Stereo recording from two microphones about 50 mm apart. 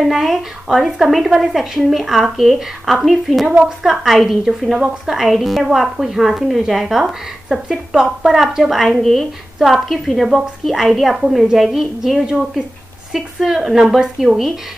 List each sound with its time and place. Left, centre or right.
0.0 s a woman's voice: centre
3.4 s speech: centre
3.8 s a woman's voice: centre